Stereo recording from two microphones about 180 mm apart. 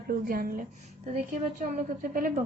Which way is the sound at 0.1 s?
55° right (ahead or behind).